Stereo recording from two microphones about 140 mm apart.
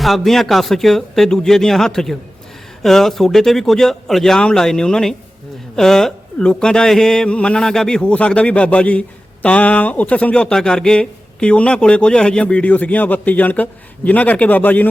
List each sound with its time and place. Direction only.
0.0 s speech: centre (ahead or behind)